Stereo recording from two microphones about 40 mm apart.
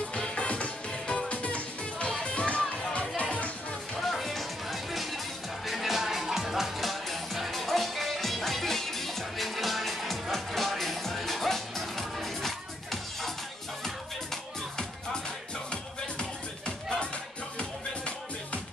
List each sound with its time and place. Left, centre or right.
0.1 s music: left
3.9 s music: centre; by 18.6 s left